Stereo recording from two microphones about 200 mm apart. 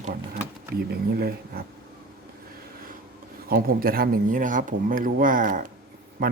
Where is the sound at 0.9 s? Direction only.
50° right (ahead or behind).